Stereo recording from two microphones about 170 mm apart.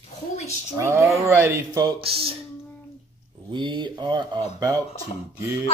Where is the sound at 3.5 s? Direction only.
30° right (ahead or behind).